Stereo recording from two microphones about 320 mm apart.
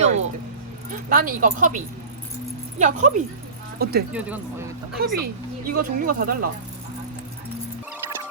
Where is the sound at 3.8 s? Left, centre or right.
Right.